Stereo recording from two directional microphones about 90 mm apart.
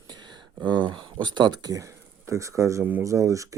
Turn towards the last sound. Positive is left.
turn(degrees=-35)  # may be behind; listen again after turning